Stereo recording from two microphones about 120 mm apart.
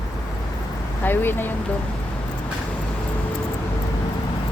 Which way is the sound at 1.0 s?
20° left (ahead or behind).